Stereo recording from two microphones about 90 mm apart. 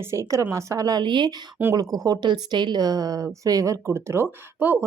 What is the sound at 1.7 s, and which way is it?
Speech, 45° right (ahead or behind).